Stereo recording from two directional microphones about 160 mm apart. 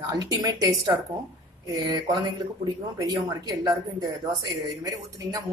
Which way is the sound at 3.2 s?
20° right (ahead or behind).